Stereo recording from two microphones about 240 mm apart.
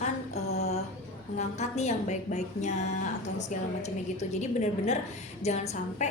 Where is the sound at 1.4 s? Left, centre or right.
Left.